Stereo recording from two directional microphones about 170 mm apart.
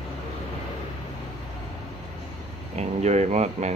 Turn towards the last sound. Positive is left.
turn(degrees=-40)  # may be behind; listen again after turning